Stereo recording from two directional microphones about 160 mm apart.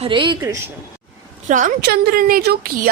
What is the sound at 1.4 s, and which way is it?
Speech, 50° right (ahead or behind).